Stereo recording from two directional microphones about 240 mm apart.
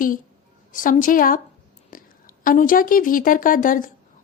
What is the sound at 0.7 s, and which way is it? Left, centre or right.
A woman's voice, left.